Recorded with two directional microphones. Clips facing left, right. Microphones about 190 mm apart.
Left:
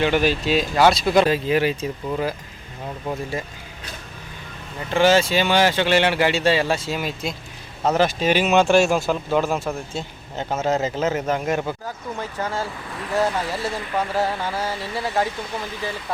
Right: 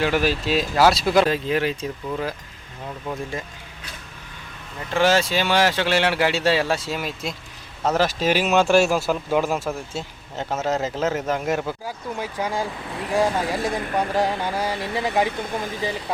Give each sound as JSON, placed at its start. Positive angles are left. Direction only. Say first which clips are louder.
{"t": 0.0, "sound": "speech", "louder": "left 2 dB", "side_deg": 0}
{"t": 4.9, "sound": "speech", "louder": "left 2 dB", "side_deg": 0}